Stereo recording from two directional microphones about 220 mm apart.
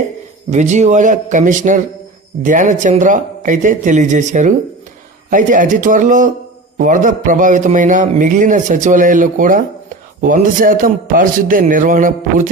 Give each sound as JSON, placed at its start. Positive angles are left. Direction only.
{"t": 0.5, "sound": "a man's voice", "side_deg": -35}